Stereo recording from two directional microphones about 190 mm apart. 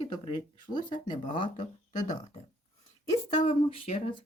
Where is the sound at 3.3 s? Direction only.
35° left (ahead or behind).